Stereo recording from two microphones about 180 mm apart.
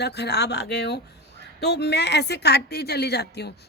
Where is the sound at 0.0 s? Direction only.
65° left (ahead or behind).